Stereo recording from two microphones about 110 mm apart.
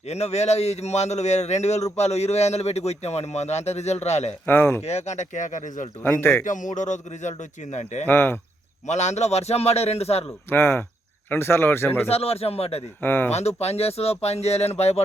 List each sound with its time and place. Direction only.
0.1 s a man's voice: 80° left
4.4 s speech: 20° left (ahead or behind)
4.8 s a man's voice: 80° left
6.7 s a man's voice: 90° left
8.0 s speech: 20° left (ahead or behind)
8.9 s speech: 90° left; by 10.2 s 70° left (ahead or behind)
10.5 s speech: 20° left (ahead or behind)
12.0 s speech: 65° left (ahead or behind)
13.0 s speech: 20° left (ahead or behind)
13.3 s speech: 75° left (ahead or behind)